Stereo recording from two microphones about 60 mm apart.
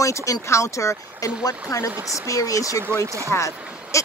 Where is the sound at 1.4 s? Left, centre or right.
Left.